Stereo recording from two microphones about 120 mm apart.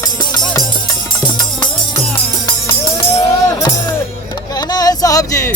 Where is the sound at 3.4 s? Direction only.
25° left (ahead or behind).